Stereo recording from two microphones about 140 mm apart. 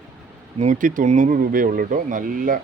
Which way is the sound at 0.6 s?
65° right (ahead or behind).